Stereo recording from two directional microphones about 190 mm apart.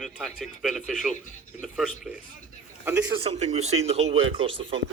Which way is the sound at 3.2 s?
35° right (ahead or behind).